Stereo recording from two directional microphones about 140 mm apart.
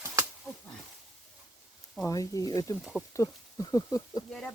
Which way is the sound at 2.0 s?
25° left (ahead or behind).